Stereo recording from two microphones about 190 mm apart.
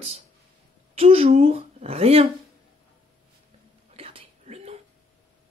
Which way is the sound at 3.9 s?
30° right (ahead or behind).